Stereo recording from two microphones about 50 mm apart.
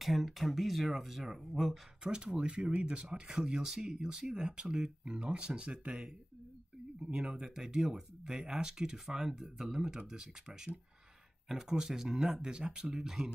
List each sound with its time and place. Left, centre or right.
0.0 s speech: centre
2.0 s speech: right